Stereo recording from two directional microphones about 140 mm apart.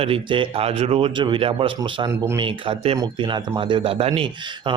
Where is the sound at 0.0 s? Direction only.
40° right (ahead or behind).